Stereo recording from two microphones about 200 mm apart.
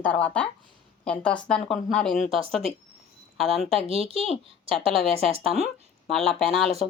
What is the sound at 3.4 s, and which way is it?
Speech, centre (ahead or behind).